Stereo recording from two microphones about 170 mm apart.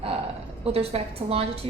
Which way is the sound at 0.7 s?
35° right (ahead or behind).